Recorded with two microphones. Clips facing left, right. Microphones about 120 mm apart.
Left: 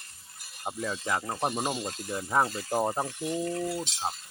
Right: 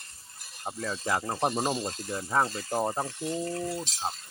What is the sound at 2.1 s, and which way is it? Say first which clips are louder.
Speech: left 1 dB; 5° left (ahead or behind).